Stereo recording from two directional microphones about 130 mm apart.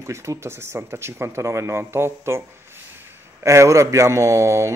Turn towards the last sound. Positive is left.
turn(degrees=-25)  # may be behind; listen again after turning